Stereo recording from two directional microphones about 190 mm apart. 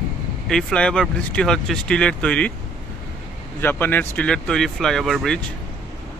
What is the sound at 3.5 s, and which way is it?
Speech, 10° left (ahead or behind).